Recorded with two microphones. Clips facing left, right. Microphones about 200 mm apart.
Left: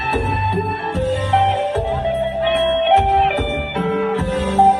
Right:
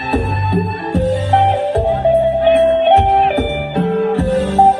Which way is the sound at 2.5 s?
35° right (ahead or behind).